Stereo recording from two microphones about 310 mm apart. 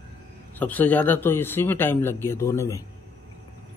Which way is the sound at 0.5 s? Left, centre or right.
Centre.